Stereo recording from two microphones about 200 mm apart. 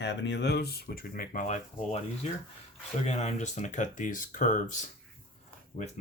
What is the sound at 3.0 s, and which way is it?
Speech, 35° left (ahead or behind).